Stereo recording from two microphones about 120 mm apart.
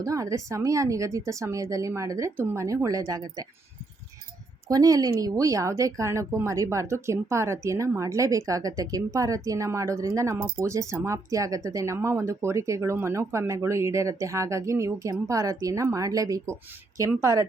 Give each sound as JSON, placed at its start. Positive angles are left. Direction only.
{"t": 0.0, "sound": "speech", "side_deg": -25}
{"t": 4.7, "sound": "speech", "side_deg": -30}